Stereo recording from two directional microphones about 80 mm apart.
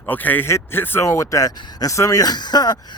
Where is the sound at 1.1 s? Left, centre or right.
Left.